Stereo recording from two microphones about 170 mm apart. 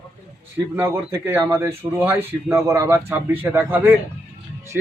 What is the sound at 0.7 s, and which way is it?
A man's voice, 15° right (ahead or behind).